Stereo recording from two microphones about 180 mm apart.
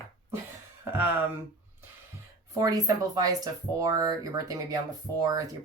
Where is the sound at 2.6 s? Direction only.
20° right (ahead or behind).